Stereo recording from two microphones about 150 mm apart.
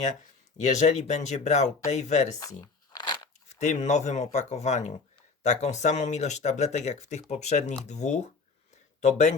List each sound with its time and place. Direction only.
0.5 s speech: 50° left (ahead or behind)
2.4 s crunch: 25° left (ahead or behind)
3.5 s speech: 50° left (ahead or behind)